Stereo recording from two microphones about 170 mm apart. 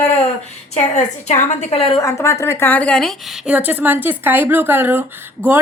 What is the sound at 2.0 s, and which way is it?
A woman's voice, 15° left (ahead or behind).